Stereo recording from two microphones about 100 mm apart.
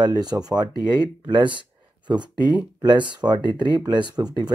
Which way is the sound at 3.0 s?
45° right (ahead or behind).